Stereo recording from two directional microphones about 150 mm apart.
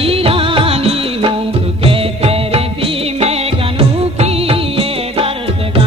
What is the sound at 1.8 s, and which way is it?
Music, 40° right (ahead or behind).